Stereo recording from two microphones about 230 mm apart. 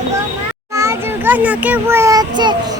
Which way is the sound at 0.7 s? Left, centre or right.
Centre.